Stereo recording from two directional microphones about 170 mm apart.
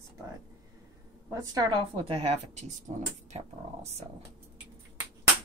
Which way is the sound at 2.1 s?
40° right (ahead or behind).